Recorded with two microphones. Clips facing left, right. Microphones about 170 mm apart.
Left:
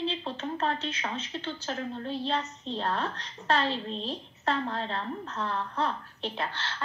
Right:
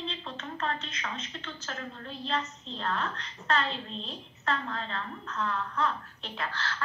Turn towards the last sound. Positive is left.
turn(degrees=25)  # may be behind; listen again after turning